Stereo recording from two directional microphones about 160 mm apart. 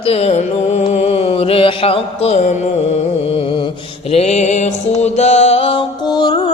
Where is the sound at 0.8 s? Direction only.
45° left (ahead or behind).